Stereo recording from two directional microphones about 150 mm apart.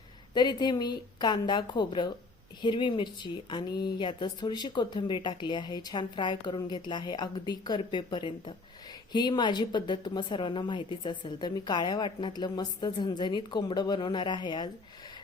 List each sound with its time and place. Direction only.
0.3 s a woman's voice: 30° left (ahead or behind)